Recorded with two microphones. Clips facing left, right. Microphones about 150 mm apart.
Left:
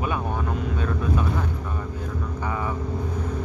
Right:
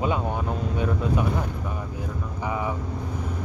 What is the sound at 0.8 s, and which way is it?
Speech, 20° right (ahead or behind).